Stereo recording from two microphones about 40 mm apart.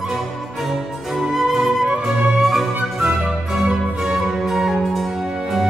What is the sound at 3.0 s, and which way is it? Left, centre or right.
Music, right.